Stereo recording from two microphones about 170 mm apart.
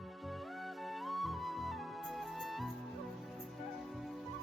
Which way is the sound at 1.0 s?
Centre (ahead or behind).